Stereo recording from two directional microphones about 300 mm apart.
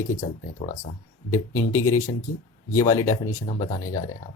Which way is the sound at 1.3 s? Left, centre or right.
Centre.